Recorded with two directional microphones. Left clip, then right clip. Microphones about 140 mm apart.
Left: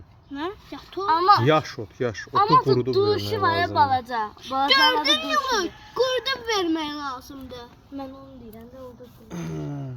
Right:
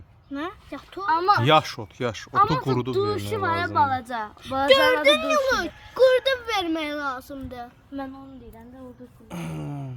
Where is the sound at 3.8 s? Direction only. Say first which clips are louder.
Left 2 dB; 20° right (ahead or behind).